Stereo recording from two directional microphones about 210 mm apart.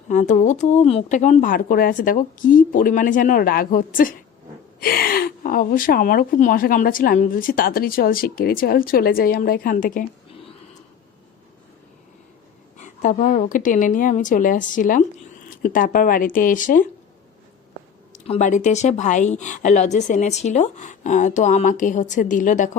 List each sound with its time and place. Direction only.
0.1 s a woman's voice: 35° left (ahead or behind)
12.7 s a woman's voice: 35° left (ahead or behind)
18.3 s a woman's voice: 35° left (ahead or behind)